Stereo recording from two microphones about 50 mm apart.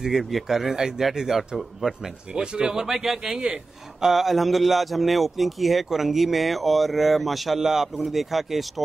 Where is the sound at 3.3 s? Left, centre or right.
Centre.